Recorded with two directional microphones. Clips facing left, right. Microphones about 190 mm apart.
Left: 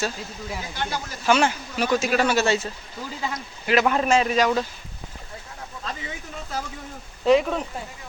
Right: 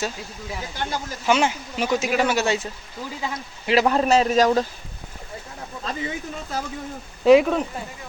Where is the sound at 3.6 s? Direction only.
30° right (ahead or behind).